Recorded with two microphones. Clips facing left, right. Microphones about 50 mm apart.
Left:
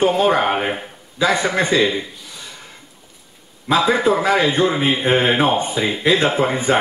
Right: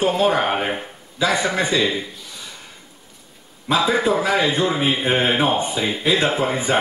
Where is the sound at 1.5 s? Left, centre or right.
Left.